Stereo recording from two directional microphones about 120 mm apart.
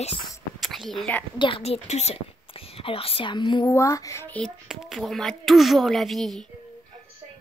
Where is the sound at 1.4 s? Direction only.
50° left (ahead or behind).